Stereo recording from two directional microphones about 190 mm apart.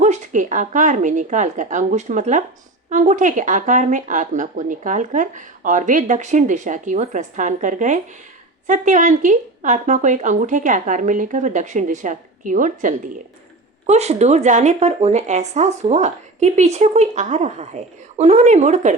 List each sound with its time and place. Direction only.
0.0 s speech: 40° right (ahead or behind)